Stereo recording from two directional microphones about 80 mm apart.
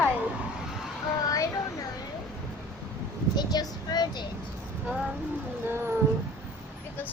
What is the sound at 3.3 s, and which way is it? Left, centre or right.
Speech, left.